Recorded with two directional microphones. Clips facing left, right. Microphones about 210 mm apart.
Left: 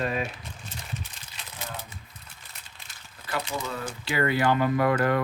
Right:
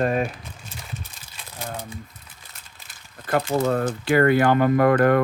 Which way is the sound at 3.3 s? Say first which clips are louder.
Right 11 dB; 50° right (ahead or behind).